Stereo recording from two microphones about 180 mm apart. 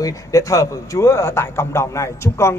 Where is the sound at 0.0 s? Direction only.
20° left (ahead or behind).